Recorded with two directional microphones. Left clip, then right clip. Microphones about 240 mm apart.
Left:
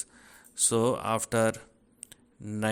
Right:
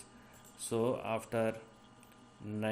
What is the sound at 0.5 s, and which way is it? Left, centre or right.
Speech, left.